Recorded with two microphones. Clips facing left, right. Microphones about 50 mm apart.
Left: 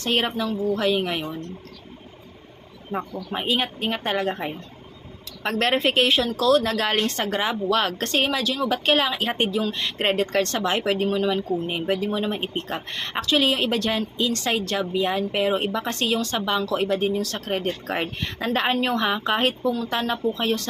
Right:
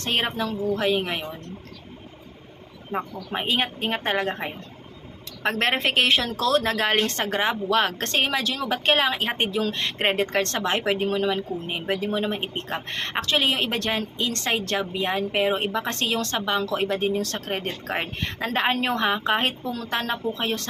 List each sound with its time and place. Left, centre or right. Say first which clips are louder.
0.0 s a woman's voice: left 2 dB; right
2.9 s a woman's voice: even; right
4.3 s speech: left 2 dB; right
5.8 s a woman's voice: left 1 dB; right
6.4 s a woman's voice: left 4 dB; right
9.6 s a woman's voice: even; right
10.0 s a woman's voice: left 1 dB; right
10.8 s a woman's voice: even; right
12.9 s a woman's voice: left 1 dB; right
16.9 s a woman's voice: left 1 dB; right
17.5 s speech: left 4 dB; right
18.3 s a woman's voice: even; right